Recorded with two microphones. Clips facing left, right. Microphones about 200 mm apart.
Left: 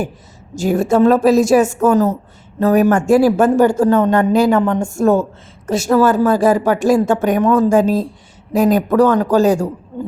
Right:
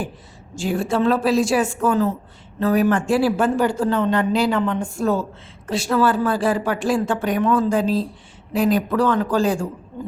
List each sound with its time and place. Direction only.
0.5 s a woman's voice: 40° left (ahead or behind)